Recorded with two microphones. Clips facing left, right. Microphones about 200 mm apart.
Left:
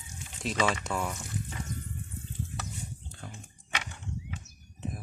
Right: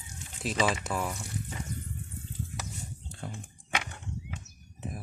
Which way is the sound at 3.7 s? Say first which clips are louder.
Right 3 dB; 55° right (ahead or behind).